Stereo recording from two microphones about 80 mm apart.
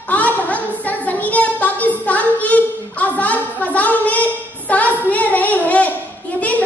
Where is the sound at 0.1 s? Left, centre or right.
Centre.